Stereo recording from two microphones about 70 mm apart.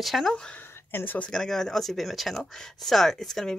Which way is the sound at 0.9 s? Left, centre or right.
Left.